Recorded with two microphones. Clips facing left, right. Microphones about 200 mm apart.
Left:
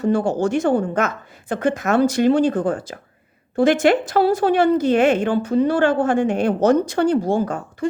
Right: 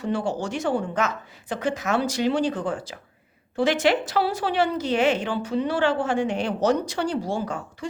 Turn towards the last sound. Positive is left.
turn(degrees=55)  # may be behind; listen again after turning